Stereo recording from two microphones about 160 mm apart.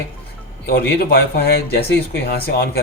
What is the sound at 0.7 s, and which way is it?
Speech, 70° left (ahead or behind).